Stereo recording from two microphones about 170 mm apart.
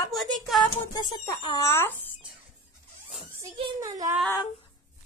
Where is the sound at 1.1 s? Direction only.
25° left (ahead or behind).